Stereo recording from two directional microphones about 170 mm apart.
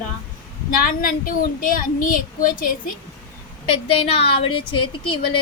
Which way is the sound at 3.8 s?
35° left (ahead or behind).